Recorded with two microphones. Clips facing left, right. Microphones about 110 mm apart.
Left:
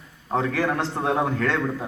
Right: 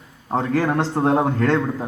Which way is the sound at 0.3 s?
35° right (ahead or behind).